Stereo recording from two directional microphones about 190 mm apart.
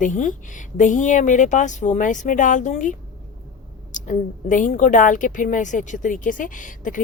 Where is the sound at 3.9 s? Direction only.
40° left (ahead or behind).